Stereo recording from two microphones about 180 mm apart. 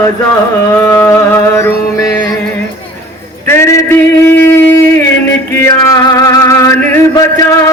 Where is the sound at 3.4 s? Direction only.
15° left (ahead or behind).